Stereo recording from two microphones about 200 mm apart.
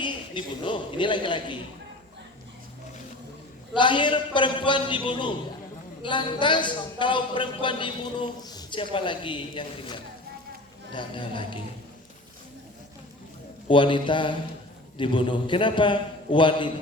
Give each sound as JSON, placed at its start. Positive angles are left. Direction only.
{"t": 0.0, "sound": "a man's voice", "side_deg": 25}
{"t": 3.8, "sound": "a man's voice", "side_deg": 25}
{"t": 13.7, "sound": "a man's voice", "side_deg": 25}